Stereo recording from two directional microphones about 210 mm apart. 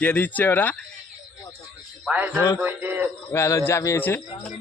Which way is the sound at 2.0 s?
5° right (ahead or behind).